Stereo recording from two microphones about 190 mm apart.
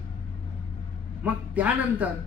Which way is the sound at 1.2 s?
10° right (ahead or behind).